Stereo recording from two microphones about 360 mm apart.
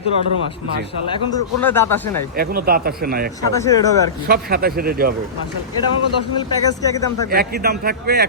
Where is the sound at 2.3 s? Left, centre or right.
Right.